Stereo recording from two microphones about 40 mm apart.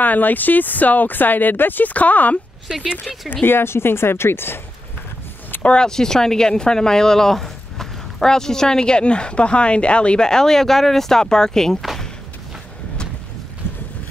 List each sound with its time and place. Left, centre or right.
0.0 s speech: left
3.4 s a woman's voice: left
5.6 s speech: left
5.9 s speech: centre